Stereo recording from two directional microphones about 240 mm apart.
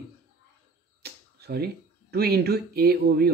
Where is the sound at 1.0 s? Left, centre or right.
Right.